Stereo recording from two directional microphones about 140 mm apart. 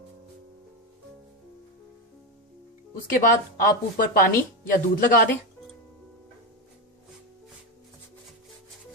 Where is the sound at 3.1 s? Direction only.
80° left.